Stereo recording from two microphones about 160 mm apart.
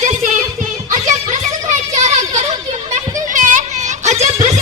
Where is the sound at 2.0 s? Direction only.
45° right (ahead or behind).